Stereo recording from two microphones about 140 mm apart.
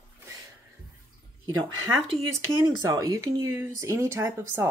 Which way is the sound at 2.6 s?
25° right (ahead or behind).